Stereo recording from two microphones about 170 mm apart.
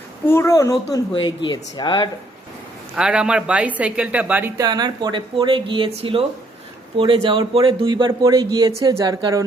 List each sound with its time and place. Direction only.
0.3 s speech: 15° left (ahead or behind)
2.9 s speech: 5° right (ahead or behind)
4.5 s speech: 25° right (ahead or behind)